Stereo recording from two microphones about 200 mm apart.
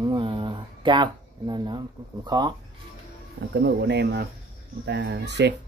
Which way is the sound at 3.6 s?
60° right (ahead or behind).